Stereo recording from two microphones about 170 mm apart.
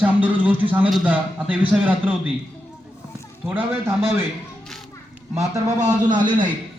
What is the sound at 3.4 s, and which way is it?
Speech, 10° right (ahead or behind).